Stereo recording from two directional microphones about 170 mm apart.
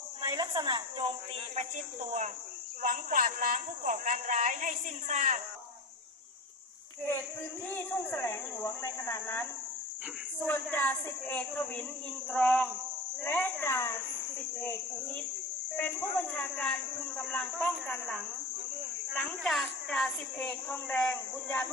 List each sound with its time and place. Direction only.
0.2 s a woman's voice: 25° right (ahead or behind)
1.5 s a woman's voice: 45° right (ahead or behind)
7.7 s a woman's voice: 10° left (ahead or behind)